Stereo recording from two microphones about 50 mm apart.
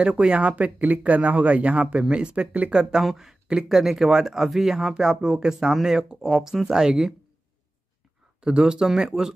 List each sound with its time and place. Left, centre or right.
0.0 s speech: centre
2.7 s speech: centre
8.4 s speech: centre